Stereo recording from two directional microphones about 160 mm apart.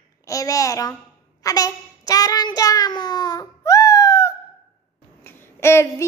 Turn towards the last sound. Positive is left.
turn(degrees=15)  # may be behind; listen again after turning